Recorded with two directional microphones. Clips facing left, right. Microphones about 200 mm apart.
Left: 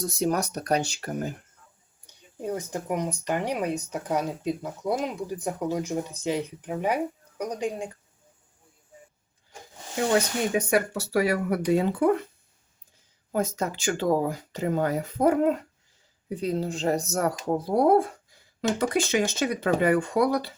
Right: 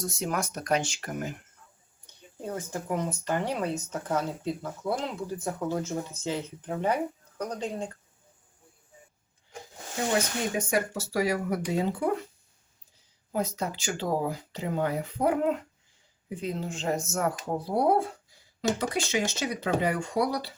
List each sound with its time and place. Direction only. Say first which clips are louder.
0.0 s speech: left 5 dB; 35° left (ahead or behind)
2.1 s a sound: even; 10° left (ahead or behind)
2.4 s speech: left 4 dB; 15° left (ahead or behind)
10.7 s speech: left 4 dB; 65° left (ahead or behind)
13.3 s speech: left 3 dB; 45° left (ahead or behind)
18.8 s speech: left 4 dB; 55° left (ahead or behind)